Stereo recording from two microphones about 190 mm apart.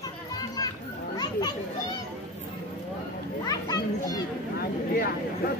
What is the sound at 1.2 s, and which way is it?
Children playing, 20° left (ahead or behind).